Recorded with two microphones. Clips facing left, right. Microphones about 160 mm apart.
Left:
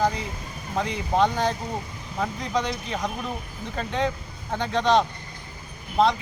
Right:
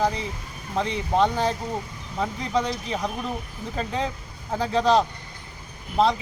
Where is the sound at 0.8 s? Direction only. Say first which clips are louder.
Right 1 dB; centre (ahead or behind).